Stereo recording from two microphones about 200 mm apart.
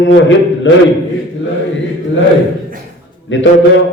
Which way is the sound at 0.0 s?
70° left (ahead or behind).